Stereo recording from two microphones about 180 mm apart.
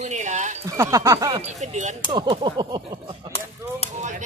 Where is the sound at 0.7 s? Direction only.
20° right (ahead or behind).